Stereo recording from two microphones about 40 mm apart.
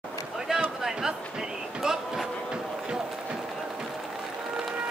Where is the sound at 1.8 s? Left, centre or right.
Centre.